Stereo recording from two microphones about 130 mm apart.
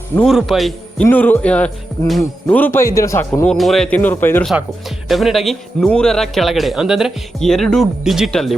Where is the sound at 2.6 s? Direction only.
15° left (ahead or behind).